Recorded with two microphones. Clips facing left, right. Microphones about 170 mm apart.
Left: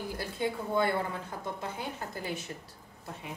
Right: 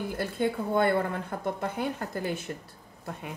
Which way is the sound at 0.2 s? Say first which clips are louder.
Right 5 dB; 55° right (ahead or behind).